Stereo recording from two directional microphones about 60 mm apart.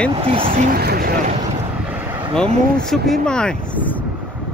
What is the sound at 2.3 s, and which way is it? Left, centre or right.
Speech, centre.